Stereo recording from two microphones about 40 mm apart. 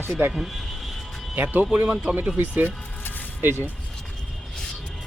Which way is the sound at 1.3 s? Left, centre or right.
Right.